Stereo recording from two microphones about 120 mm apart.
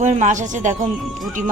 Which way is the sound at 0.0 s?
85° right.